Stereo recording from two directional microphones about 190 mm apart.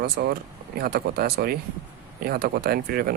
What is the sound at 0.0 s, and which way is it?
Speech, 60° right (ahead or behind).